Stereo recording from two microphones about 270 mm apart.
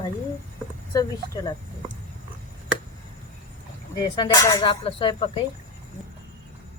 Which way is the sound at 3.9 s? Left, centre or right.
Centre.